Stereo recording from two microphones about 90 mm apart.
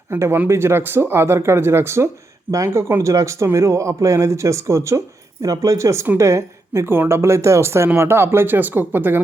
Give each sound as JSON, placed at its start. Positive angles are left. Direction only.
{"t": 0.1, "sound": "speech", "side_deg": -25}